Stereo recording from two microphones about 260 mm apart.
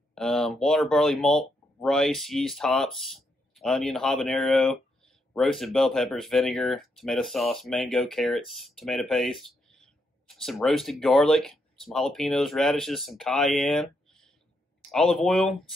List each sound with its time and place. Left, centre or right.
0.1 s speech: centre